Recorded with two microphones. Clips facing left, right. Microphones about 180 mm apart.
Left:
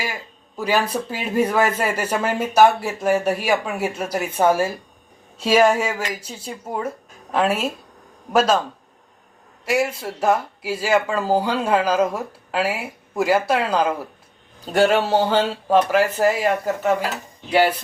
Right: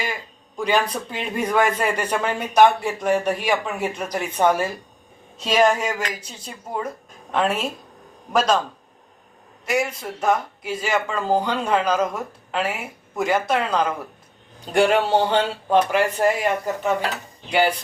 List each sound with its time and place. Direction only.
0.0 s a man's voice: 5° left (ahead or behind)
9.6 s a man's voice: 5° left (ahead or behind)